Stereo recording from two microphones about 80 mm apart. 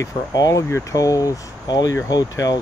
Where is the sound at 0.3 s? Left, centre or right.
Left.